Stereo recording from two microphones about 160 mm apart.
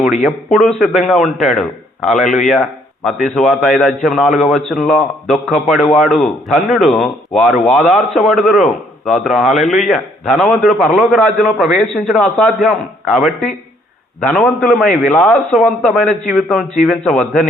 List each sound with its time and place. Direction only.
0.3 s a man's voice: centre (ahead or behind)